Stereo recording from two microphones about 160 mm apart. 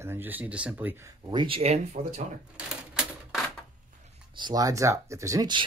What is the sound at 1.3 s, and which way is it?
Speech, 30° right (ahead or behind).